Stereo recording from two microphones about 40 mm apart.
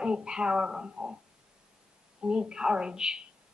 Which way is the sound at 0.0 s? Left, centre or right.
Right.